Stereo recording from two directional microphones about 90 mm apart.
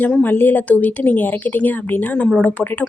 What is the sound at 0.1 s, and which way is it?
Speech, 20° left (ahead or behind).